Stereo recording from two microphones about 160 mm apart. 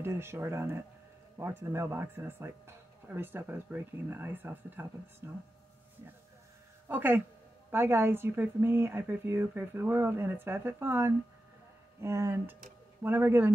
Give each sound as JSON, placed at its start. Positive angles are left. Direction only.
{"t": 0.0, "sound": "speech", "side_deg": -15}
{"t": 6.9, "sound": "speech", "side_deg": -10}